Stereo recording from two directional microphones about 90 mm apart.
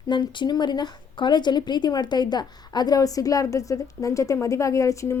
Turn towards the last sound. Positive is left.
turn(degrees=35)  # may be behind; listen again after turning